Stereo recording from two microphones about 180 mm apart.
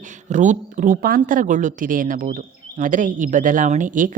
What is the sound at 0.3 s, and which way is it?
Speech, 40° right (ahead or behind).